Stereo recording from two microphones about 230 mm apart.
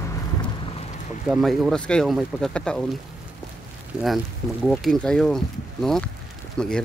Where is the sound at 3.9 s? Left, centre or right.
Centre.